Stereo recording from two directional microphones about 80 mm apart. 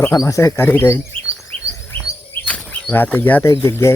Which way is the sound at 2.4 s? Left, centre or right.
Centre.